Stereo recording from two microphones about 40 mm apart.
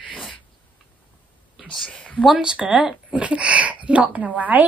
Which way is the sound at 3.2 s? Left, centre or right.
Right.